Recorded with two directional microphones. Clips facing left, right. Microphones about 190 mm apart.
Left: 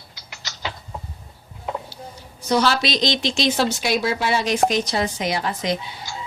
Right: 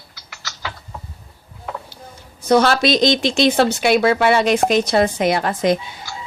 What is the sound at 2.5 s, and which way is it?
Speech, 55° right (ahead or behind).